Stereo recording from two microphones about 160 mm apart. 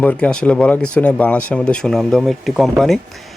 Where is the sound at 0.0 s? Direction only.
10° left (ahead or behind).